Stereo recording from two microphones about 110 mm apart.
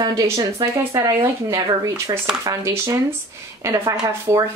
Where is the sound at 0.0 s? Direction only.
30° right (ahead or behind).